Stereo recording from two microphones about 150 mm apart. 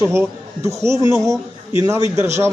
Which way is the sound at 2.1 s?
20° right (ahead or behind).